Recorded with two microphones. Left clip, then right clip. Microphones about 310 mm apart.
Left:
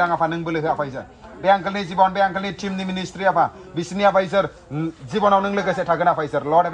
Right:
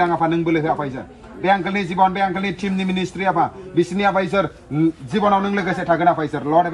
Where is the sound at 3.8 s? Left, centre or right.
Centre.